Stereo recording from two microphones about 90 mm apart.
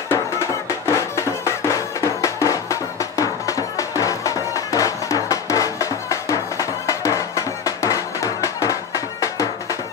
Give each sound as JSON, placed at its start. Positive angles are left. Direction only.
{"t": 0.1, "sound": "music", "side_deg": 30}